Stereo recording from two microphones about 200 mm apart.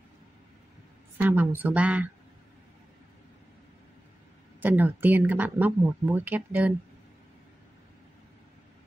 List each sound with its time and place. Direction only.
1.1 s speech: 10° right (ahead or behind)
4.6 s speech: 10° right (ahead or behind)